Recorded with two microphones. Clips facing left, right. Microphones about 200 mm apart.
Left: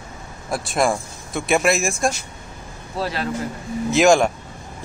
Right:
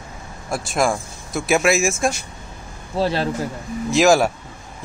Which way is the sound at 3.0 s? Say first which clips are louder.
Right 5 dB; 30° right (ahead or behind).